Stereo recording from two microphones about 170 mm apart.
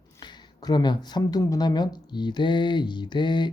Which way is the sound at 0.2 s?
25° left (ahead or behind).